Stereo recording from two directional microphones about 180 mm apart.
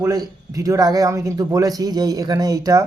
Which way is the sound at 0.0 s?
20° right (ahead or behind).